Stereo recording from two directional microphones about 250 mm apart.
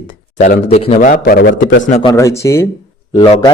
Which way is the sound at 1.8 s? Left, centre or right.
Left.